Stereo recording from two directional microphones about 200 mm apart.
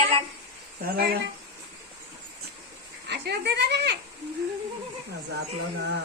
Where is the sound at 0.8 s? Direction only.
50° right (ahead or behind).